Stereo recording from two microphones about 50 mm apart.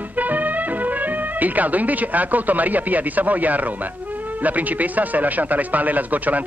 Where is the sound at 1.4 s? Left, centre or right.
Right.